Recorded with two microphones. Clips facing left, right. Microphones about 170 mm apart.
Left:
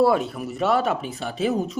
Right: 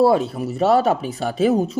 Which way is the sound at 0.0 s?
30° right (ahead or behind).